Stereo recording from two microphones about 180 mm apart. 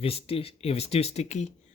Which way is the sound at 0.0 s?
35° left (ahead or behind).